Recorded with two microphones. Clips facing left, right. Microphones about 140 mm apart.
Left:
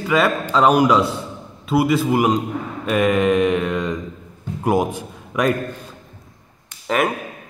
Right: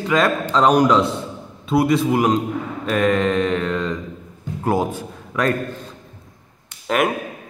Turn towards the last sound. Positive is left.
turn(degrees=0)  # may be behind; listen again after turning